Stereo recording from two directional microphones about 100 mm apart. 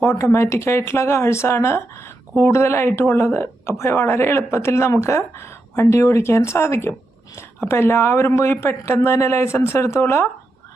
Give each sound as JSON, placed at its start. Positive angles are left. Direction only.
{"t": 0.0, "sound": "speech", "side_deg": 30}